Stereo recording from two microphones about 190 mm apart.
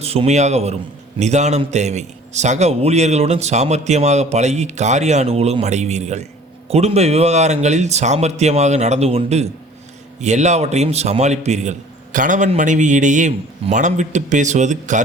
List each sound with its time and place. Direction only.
0.0 s a man's voice: 30° right (ahead or behind)